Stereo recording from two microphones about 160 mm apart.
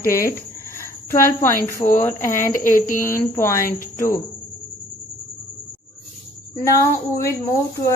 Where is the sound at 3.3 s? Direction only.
15° left (ahead or behind).